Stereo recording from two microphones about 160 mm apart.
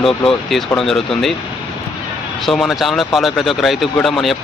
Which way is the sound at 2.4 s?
Centre (ahead or behind).